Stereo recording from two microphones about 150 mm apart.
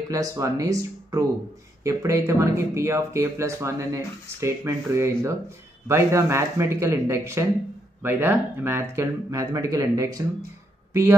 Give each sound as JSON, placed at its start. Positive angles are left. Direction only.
{"t": 0.1, "sound": "speech", "side_deg": -20}